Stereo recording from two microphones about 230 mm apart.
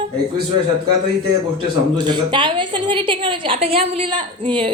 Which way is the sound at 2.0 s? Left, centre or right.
Centre.